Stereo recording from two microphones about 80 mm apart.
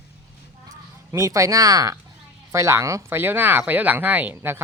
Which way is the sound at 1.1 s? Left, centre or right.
Right.